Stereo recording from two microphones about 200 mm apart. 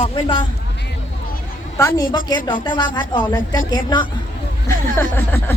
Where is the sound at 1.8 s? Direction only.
15° left (ahead or behind).